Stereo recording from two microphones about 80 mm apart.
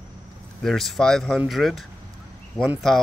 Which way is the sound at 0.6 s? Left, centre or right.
Centre.